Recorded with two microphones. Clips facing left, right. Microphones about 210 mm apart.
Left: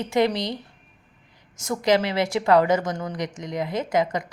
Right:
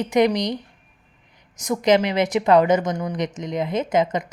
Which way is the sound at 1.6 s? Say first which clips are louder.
Right 3 dB; 20° right (ahead or behind).